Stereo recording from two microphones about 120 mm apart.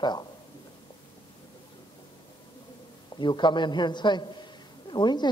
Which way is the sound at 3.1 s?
40° left (ahead or behind).